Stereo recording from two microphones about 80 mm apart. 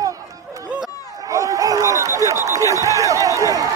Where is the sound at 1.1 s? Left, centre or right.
Right.